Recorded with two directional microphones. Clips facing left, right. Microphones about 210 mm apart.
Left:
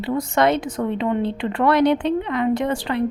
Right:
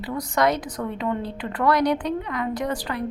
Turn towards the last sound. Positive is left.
turn(degrees=25)  # may be behind; listen again after turning